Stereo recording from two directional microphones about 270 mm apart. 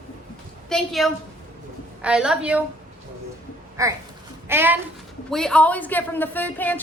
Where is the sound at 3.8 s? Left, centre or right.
Centre.